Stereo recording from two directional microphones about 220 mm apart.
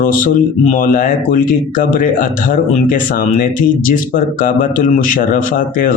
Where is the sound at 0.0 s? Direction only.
40° left (ahead or behind).